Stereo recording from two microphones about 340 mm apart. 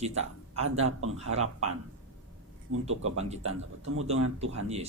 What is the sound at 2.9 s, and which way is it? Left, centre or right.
A man's voice, right.